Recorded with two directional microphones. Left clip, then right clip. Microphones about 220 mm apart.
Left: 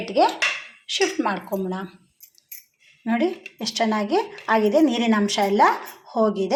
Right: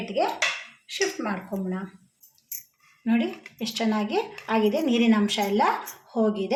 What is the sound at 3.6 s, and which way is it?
Speech, 10° left (ahead or behind).